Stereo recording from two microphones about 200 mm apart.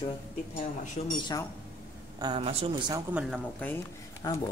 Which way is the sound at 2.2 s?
25° right (ahead or behind).